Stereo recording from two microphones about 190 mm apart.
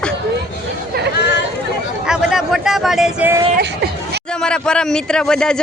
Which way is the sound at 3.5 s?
60° right (ahead or behind).